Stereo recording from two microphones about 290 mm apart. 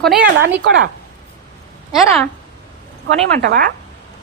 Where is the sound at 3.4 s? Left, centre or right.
Right.